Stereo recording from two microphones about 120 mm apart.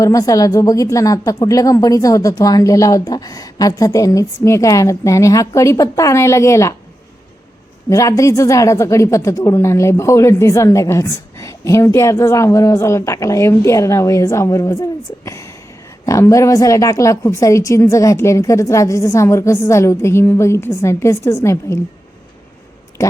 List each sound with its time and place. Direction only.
0.0 s a woman's voice: 30° left (ahead or behind)
7.9 s a woman's voice: 25° left (ahead or behind)
23.0 s speech: 25° left (ahead or behind)